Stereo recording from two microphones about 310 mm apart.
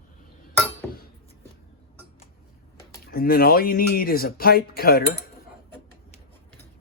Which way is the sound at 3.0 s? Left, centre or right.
Left.